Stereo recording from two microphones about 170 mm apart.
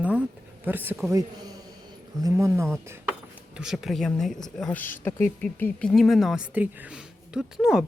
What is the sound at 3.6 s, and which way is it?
Speech, centre (ahead or behind).